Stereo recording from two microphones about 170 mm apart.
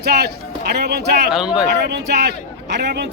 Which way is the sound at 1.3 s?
5° right (ahead or behind).